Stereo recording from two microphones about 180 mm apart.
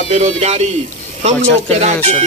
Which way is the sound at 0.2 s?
35° right (ahead or behind).